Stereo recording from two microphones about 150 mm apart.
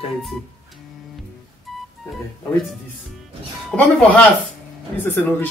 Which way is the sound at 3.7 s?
5° left (ahead or behind).